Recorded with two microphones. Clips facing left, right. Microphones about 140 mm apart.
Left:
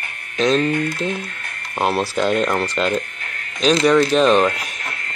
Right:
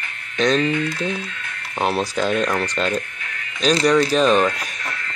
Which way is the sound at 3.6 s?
5° left (ahead or behind).